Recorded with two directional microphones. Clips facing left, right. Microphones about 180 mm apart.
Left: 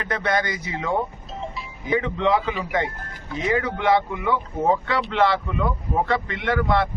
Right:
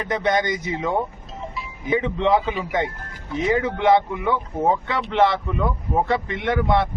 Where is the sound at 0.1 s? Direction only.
20° right (ahead or behind).